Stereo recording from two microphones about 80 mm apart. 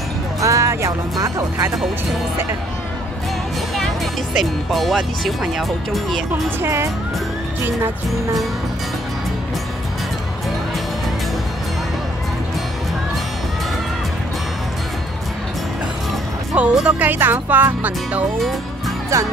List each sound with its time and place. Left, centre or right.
0.4 s speech: right
3.7 s speech: centre
6.6 s speech: right
16.5 s speech: centre
19.1 s speech: right